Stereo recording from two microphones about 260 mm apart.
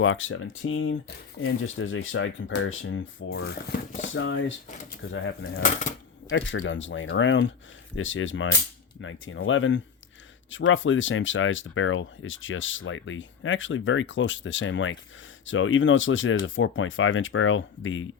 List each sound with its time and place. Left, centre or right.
0.0 s speech: left